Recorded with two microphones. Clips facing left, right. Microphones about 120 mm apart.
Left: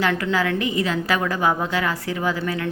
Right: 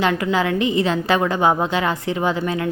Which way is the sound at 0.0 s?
20° right (ahead or behind).